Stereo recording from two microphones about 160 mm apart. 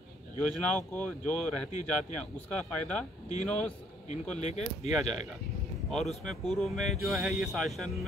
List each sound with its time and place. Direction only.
0.4 s speech: 5° left (ahead or behind)
1.7 s speech: 45° left (ahead or behind)
2.1 s a man's voice: 5° left (ahead or behind)
4.4 s speech: 45° left (ahead or behind)
5.9 s speech: 5° left (ahead or behind)